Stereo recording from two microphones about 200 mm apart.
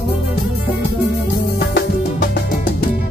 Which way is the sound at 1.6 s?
55° left (ahead or behind).